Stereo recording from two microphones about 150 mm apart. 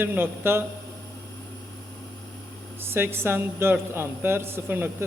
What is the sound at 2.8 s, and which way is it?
A man's voice, 15° right (ahead or behind).